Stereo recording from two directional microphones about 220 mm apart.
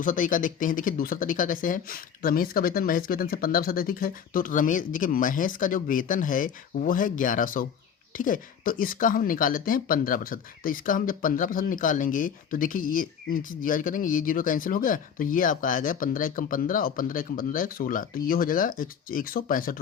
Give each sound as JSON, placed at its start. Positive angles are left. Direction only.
{"t": 0.0, "sound": "speech", "side_deg": 35}